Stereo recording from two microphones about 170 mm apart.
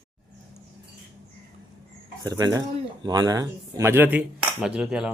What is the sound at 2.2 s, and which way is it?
Speech, 20° right (ahead or behind).